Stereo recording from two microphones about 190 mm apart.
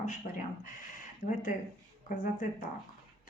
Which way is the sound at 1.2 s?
45° left (ahead or behind).